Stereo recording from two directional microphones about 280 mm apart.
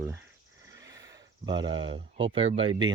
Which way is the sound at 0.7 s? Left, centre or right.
Centre.